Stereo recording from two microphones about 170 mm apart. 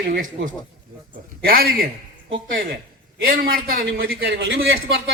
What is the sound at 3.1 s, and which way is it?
A man's voice, 65° right (ahead or behind).